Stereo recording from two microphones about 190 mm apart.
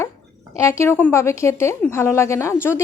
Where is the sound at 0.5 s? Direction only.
15° left (ahead or behind).